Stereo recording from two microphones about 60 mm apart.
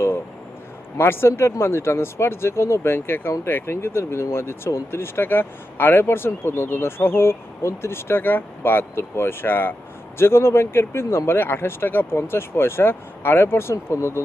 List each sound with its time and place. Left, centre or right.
0.9 s speech: left